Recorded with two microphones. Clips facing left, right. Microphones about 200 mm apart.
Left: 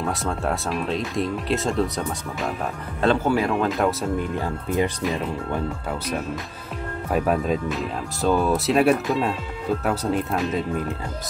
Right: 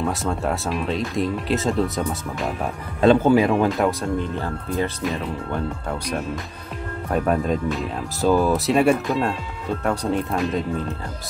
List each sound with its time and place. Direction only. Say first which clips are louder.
0.0 s speech: right 2 dB; centre (ahead or behind)
3.0 s speech: right 5 dB; 15° right (ahead or behind)
3.7 s speech: right 1 dB; centre (ahead or behind)
4.2 s speech: even; 15° left (ahead or behind)
5.0 s speech: even; centre (ahead or behind)